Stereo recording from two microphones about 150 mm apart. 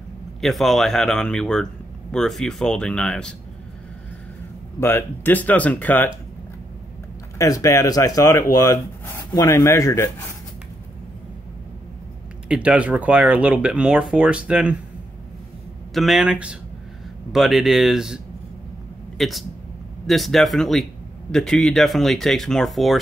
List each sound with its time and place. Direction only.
0.4 s speech: centre (ahead or behind)
4.7 s speech: 15° left (ahead or behind)
7.3 s speech: 20° left (ahead or behind)
12.4 s speech: 5° right (ahead or behind)
15.9 s speech: centre (ahead or behind)